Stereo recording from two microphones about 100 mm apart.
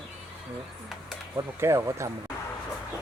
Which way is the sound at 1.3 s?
30° right (ahead or behind).